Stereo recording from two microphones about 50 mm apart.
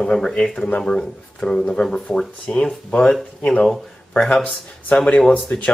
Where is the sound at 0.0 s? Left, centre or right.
Centre.